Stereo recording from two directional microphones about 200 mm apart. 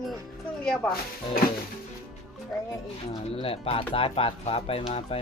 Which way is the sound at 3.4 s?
25° left (ahead or behind).